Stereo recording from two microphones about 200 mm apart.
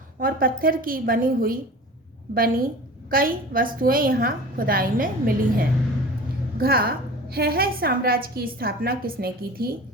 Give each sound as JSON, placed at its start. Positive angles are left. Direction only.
{"t": 0.2, "sound": "a woman's voice", "side_deg": -45}